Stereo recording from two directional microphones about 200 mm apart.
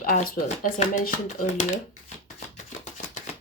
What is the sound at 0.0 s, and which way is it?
Speech, 45° left (ahead or behind).